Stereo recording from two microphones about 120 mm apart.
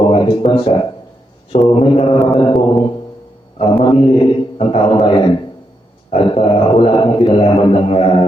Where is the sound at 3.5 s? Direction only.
50° left (ahead or behind).